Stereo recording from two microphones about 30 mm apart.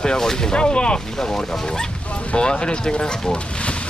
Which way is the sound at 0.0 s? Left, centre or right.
Centre.